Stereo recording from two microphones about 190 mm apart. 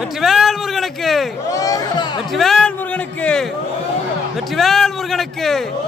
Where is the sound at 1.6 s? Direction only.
20° left (ahead or behind).